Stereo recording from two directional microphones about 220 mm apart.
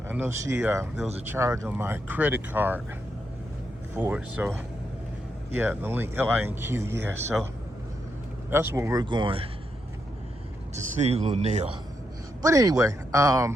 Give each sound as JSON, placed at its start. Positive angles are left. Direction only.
{"t": 0.1, "sound": "speech", "side_deg": -10}
{"t": 3.9, "sound": "speech", "side_deg": -10}
{"t": 8.4, "sound": "speech", "side_deg": -10}
{"t": 10.9, "sound": "speech", "side_deg": -30}
{"t": 12.4, "sound": "speech", "side_deg": -15}